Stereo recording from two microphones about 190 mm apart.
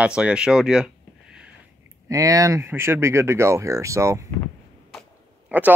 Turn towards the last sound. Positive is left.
turn(degrees=-10)  # may be behind; listen again after turning